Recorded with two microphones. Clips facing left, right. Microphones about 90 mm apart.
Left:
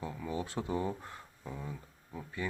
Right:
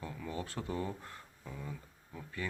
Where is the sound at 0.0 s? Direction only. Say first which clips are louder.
Left 3 dB; 15° left (ahead or behind).